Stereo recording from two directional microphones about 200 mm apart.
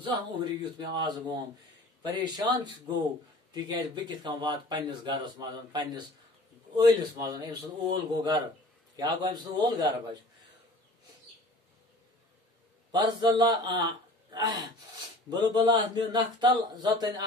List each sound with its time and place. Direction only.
0.0 s speech: 20° right (ahead or behind)
12.9 s a man's voice: 20° right (ahead or behind)